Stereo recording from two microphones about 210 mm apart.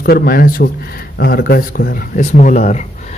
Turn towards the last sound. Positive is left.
turn(degrees=35)  # may be behind; listen again after turning